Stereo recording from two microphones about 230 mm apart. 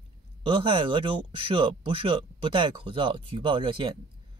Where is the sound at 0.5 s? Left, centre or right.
Right.